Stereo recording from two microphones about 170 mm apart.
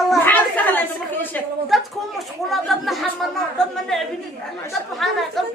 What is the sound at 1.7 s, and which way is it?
Speech, centre (ahead or behind).